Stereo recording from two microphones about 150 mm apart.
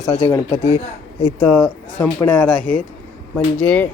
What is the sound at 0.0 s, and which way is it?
Speech, 40° left (ahead or behind).